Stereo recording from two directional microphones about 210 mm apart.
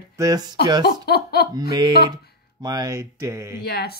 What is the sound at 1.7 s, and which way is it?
Speech, 20° right (ahead or behind).